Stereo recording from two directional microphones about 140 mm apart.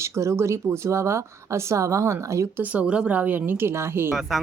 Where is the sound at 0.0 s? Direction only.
20° right (ahead or behind).